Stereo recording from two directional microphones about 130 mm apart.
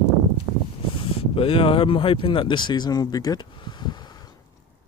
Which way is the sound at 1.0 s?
45° left (ahead or behind).